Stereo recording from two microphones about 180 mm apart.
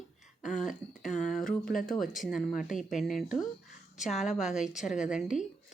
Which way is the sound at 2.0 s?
Centre (ahead or behind).